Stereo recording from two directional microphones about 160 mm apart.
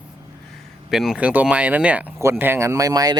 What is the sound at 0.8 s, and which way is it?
Speech, centre (ahead or behind).